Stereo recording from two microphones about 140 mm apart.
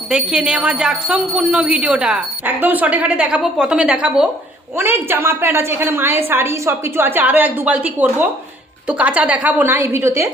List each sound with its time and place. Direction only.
0.1 s speech: 5° right (ahead or behind)